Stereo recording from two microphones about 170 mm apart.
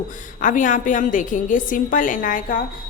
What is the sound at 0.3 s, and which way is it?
Speech, 50° left (ahead or behind).